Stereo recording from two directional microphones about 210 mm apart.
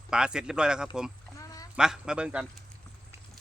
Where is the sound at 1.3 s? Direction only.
15° left (ahead or behind).